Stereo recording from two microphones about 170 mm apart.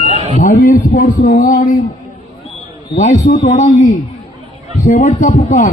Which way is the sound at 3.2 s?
45° left (ahead or behind).